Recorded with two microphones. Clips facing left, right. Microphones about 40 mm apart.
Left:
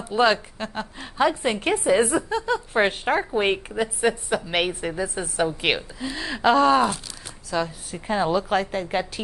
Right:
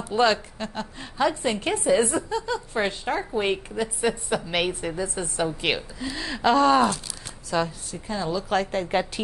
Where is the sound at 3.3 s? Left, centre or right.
Left.